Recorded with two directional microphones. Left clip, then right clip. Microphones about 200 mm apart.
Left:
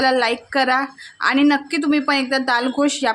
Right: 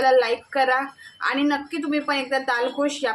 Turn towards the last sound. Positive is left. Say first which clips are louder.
# left 4 dB
turn(degrees=55)  # may be behind; listen again after turning